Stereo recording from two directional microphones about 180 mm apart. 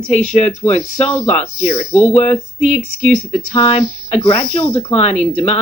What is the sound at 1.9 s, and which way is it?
Speech, 40° left (ahead or behind).